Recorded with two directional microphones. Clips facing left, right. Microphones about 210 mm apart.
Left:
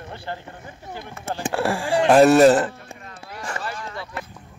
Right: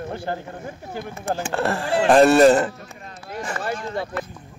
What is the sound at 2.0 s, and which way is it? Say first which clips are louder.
Speech: even; centre (ahead or behind).